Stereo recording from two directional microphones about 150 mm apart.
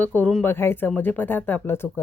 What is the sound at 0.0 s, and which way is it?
Speech, 10° left (ahead or behind).